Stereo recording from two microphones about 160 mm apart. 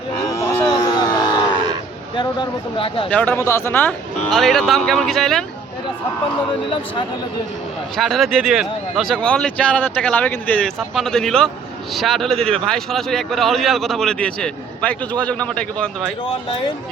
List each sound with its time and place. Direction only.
0.3 s a sound: 20° left (ahead or behind)
2.1 s speech: 30° left (ahead or behind)
3.1 s a man's voice: 5° left (ahead or behind)
7.9 s a man's voice: centre (ahead or behind)